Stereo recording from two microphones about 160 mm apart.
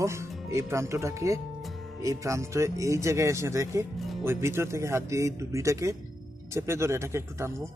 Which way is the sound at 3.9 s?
Centre (ahead or behind).